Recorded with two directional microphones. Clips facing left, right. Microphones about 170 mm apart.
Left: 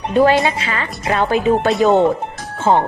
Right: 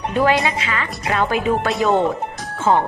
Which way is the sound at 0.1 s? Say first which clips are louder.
Left 5 dB; 30° left (ahead or behind).